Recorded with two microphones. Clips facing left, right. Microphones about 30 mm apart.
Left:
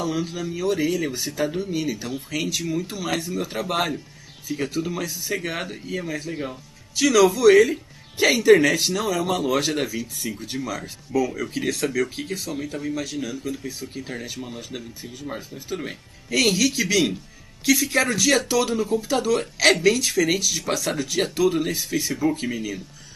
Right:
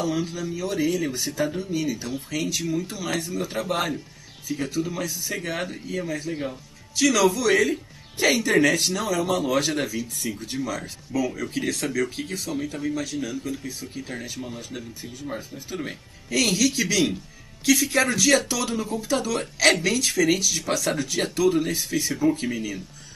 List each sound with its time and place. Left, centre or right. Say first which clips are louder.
0.0 s speech: even; centre
4.6 s speech: left 1 dB; centre
4.9 s speech: left 2 dB; centre